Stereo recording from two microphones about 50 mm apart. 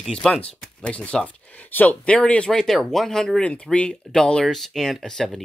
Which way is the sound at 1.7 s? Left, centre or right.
Left.